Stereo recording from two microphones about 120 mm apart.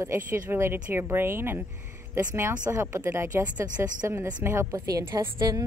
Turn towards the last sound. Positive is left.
turn(degrees=-25)  # may be behind; listen again after turning